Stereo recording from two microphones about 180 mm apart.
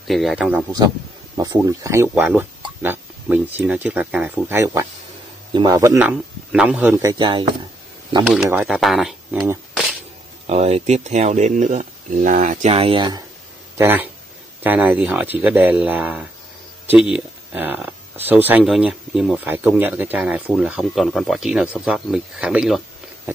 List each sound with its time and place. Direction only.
0.1 s speech: centre (ahead or behind)
1.3 s speech: 20° right (ahead or behind)
5.9 s speech: 5° right (ahead or behind); by 7.4 s 25° right (ahead or behind)
8.5 s speech: 5° right (ahead or behind)
10.4 s speech: 35° right (ahead or behind)
13.7 s speech: 10° right (ahead or behind)